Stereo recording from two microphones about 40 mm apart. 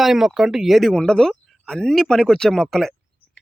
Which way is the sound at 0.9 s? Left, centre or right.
Centre.